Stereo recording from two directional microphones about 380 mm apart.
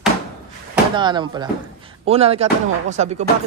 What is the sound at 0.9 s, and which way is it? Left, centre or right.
Speech, centre.